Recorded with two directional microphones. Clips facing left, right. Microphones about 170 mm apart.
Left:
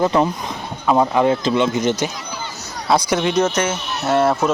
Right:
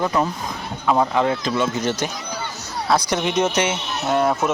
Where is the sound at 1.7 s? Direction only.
10° left (ahead or behind).